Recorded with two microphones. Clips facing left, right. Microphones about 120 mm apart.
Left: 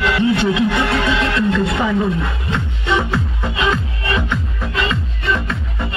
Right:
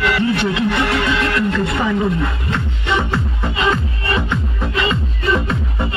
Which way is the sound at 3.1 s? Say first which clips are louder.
Even; 10° right (ahead or behind).